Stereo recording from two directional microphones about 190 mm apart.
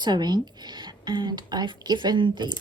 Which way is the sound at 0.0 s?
20° right (ahead or behind).